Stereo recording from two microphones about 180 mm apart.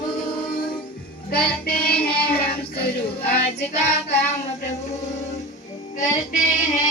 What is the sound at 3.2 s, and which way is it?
Child singing, 60° left (ahead or behind).